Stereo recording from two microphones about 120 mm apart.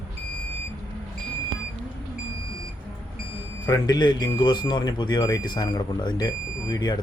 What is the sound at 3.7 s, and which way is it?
Speech, 35° left (ahead or behind).